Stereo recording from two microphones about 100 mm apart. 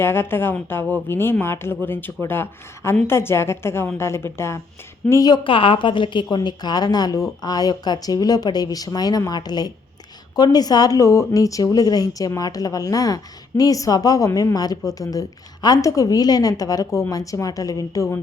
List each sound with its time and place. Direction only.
0.0 s a woman's voice: 25° left (ahead or behind)
5.3 s a woman's voice: 60° left (ahead or behind); by 18.2 s 35° left (ahead or behind)